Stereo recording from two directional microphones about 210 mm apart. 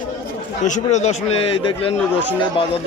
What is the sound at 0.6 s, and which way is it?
A man's voice, 35° left (ahead or behind).